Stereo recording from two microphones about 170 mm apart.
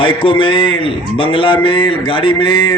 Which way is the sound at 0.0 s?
30° left (ahead or behind).